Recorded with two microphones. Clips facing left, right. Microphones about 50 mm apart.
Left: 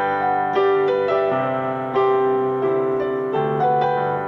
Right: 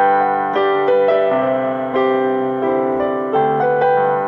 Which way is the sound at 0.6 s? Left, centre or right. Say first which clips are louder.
Right 4 dB; right.